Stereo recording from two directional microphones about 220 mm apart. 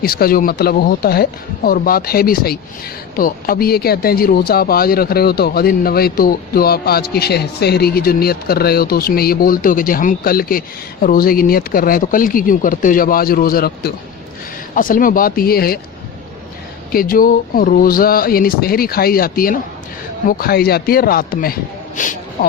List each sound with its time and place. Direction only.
0.0 s speech: 45° left (ahead or behind)
16.9 s speech: 40° left (ahead or behind)